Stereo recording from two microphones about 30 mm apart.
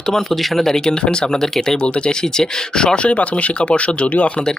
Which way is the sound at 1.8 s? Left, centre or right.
Left.